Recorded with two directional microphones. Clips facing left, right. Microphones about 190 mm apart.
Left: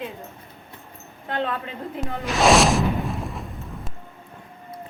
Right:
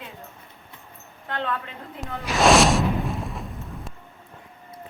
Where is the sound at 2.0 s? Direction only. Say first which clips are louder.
Even; centre (ahead or behind).